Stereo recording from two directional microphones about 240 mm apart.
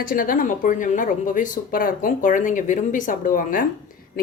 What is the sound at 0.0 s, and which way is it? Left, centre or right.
A woman's voice, left.